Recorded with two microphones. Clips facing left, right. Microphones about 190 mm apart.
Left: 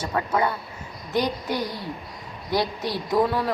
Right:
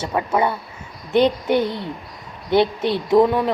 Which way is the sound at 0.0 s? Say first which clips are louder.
Right 4 dB; 20° right (ahead or behind).